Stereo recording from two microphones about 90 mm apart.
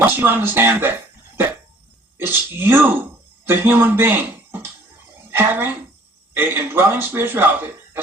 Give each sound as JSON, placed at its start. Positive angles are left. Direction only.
{"t": 0.0, "sound": "speech", "side_deg": -25}
{"t": 2.1, "sound": "speech", "side_deg": -25}